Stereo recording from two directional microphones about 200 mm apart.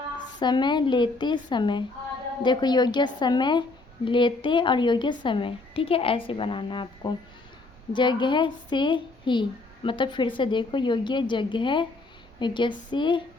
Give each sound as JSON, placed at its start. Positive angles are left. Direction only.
{"t": 0.3, "sound": "speech", "side_deg": 20}